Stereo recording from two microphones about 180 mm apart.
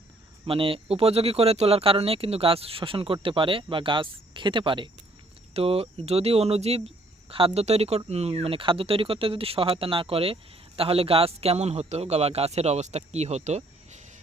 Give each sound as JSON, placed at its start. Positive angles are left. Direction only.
{"t": 0.4, "sound": "speech", "side_deg": -30}